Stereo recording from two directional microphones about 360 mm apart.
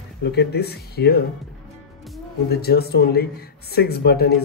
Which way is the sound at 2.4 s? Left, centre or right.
Left.